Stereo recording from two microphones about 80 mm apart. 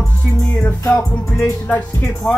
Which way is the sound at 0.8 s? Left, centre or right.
Left.